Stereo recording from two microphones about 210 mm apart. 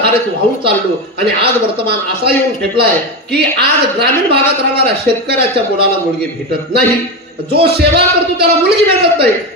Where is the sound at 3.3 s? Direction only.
50° right (ahead or behind).